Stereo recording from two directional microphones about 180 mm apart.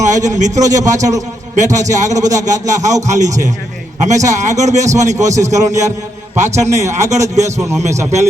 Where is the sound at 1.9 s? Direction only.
40° right (ahead or behind).